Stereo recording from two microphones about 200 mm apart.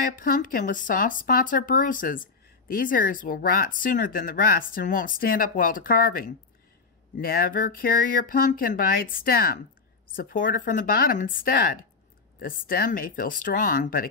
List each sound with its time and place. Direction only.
0.2 s speech: 45° left (ahead or behind)